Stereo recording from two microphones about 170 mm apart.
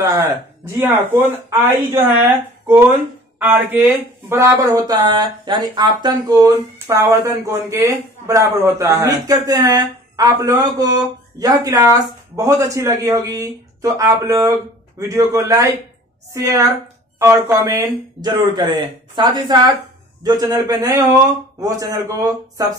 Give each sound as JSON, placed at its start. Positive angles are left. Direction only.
{"t": 0.7, "sound": "speech", "side_deg": -15}